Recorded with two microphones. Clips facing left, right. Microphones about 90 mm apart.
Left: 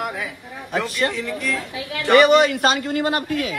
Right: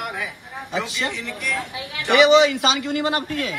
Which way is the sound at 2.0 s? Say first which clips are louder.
Left 1 dB; 60° left (ahead or behind).